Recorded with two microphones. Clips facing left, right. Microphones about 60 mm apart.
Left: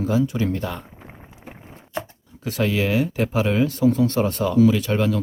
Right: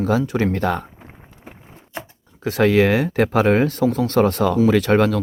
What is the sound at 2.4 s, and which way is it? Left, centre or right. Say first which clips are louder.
Speech: right 7 dB; right.